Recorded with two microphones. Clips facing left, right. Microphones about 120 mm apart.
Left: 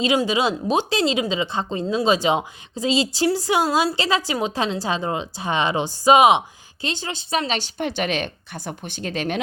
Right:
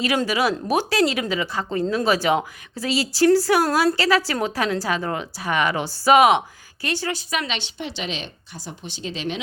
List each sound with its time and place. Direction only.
0.3 s a woman's voice: 20° left (ahead or behind); by 9.4 s 50° left (ahead or behind)